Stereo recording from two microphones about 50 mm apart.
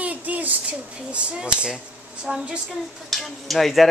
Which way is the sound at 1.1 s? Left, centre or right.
Right.